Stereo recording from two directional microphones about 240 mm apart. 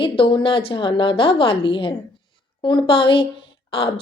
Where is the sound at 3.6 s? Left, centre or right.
Left.